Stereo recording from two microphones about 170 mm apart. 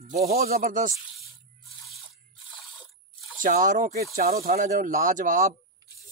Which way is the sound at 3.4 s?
50° right (ahead or behind).